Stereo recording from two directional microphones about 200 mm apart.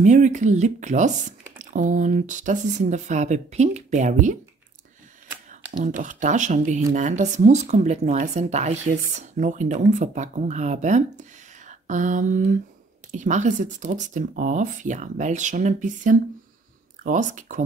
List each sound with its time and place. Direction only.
0.0 s speech: 40° right (ahead or behind)
5.9 s speech: 40° right (ahead or behind)